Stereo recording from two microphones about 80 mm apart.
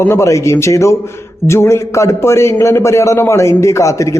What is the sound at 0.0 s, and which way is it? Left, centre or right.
A man's voice, left.